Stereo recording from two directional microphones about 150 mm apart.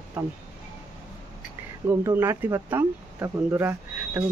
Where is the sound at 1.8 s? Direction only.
15° right (ahead or behind).